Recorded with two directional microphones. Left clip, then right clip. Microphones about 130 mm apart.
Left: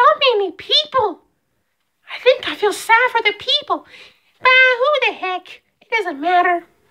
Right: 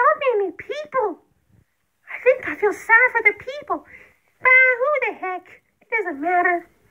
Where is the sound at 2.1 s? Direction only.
45° left (ahead or behind).